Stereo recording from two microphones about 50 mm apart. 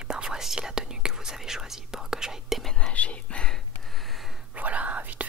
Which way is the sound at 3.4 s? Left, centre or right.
Centre.